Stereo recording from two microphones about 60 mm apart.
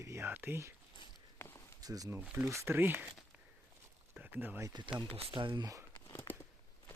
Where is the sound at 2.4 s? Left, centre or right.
Right.